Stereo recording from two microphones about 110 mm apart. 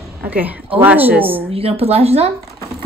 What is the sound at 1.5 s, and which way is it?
Speech, 60° right (ahead or behind).